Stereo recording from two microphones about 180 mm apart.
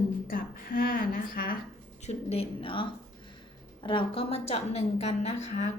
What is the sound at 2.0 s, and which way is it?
A woman's voice, 35° left (ahead or behind).